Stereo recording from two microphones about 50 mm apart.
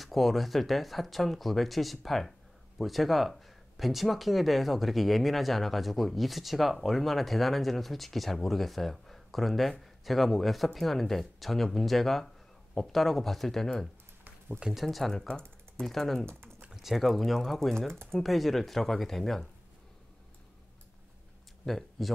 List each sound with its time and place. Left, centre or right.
0.0 s speech: centre
16.3 s typing: right
16.7 s speech: centre
21.6 s speech: centre